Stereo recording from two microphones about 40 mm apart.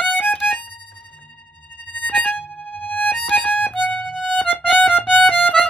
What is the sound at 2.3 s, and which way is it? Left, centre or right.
Violin, left.